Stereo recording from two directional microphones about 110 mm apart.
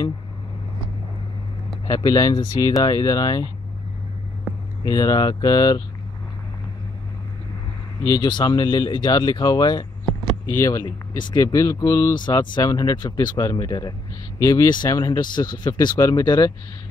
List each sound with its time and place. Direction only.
1.9 s speech: 35° left (ahead or behind)
4.8 s speech: 35° left (ahead or behind)
8.0 s speech: 40° left (ahead or behind)
11.4 s speech: 30° left (ahead or behind)
12.2 s speech: 45° left (ahead or behind)
14.4 s speech: 35° left (ahead or behind)